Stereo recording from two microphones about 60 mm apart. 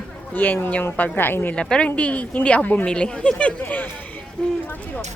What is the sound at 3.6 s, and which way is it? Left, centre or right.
Speech, left.